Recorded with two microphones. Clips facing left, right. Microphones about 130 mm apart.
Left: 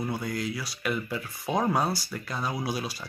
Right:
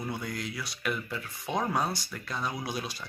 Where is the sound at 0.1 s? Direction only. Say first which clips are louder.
Left 4 dB; 5° left (ahead or behind).